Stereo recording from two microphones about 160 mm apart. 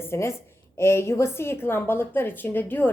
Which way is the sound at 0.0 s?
15° left (ahead or behind).